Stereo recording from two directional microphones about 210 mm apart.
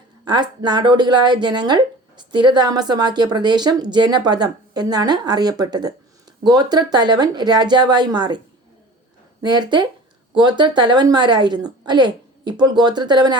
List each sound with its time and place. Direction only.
0.3 s speech: 20° right (ahead or behind)
9.4 s speech: 20° right (ahead or behind)